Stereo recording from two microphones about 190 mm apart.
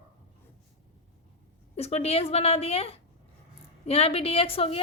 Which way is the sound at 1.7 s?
35° left (ahead or behind).